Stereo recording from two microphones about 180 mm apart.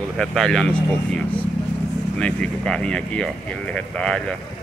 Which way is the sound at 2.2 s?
5° left (ahead or behind).